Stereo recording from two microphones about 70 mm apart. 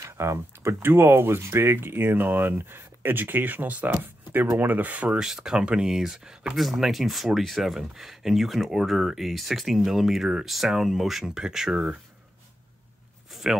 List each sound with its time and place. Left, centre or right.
0.0 s speech: right
5.2 s speech: centre
13.3 s zipper: centre